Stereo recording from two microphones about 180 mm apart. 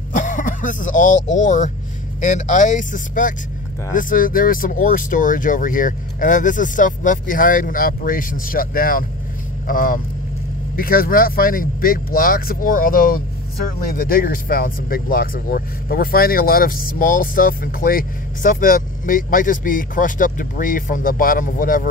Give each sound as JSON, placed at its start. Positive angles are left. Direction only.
{"t": 0.1, "sound": "cough", "side_deg": 45}
{"t": 1.3, "sound": "speech", "side_deg": 45}